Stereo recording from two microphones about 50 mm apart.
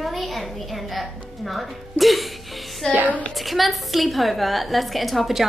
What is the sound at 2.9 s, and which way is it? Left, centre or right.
Speech, right.